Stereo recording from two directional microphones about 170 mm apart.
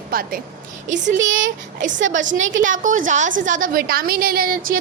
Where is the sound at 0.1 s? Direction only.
60° right (ahead or behind).